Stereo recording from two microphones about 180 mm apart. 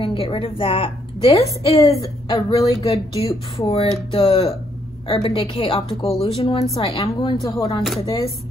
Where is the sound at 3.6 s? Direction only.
30° left (ahead or behind).